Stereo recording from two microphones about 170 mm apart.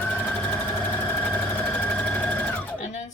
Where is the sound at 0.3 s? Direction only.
10° left (ahead or behind).